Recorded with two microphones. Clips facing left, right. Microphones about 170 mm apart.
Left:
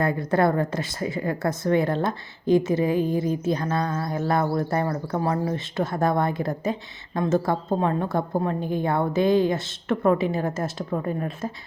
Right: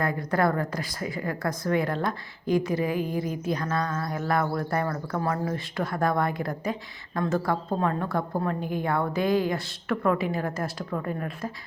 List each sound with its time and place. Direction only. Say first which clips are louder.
0.0 s a woman's voice: left 4 dB; 25° left (ahead or behind)